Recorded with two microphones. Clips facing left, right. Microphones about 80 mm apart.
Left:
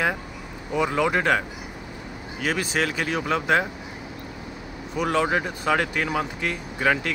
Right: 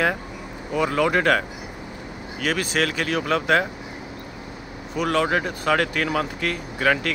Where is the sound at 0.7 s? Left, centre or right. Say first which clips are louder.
Right 2 dB; centre.